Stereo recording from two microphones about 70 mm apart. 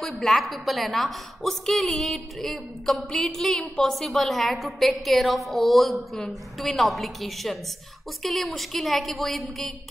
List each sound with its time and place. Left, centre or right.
0.0 s a woman's voice: centre